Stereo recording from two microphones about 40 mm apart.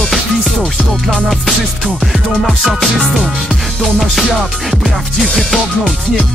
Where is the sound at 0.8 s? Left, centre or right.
Centre.